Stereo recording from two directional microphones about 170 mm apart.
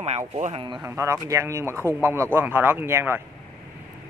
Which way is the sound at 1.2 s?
15° right (ahead or behind).